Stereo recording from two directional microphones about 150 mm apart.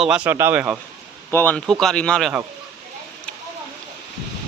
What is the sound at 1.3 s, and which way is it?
Speech, 15° left (ahead or behind).